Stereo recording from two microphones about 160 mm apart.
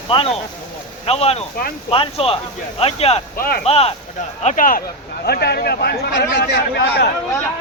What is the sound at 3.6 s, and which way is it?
Speech, 40° left (ahead or behind).